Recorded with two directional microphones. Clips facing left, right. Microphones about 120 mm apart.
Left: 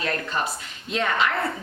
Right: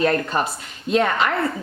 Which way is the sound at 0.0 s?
40° right (ahead or behind).